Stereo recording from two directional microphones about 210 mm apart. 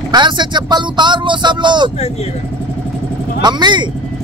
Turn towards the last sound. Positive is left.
turn(degrees=-20)  # may be behind; listen again after turning